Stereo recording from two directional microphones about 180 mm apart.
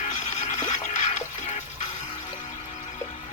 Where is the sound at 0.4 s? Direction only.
40° left (ahead or behind).